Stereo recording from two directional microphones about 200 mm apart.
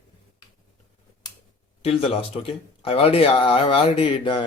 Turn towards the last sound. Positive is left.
turn(degrees=25)  # may be behind; listen again after turning